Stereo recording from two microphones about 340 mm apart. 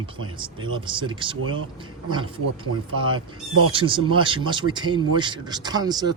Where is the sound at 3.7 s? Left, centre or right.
Centre.